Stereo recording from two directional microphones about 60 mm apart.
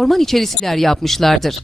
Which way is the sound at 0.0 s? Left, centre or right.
Centre.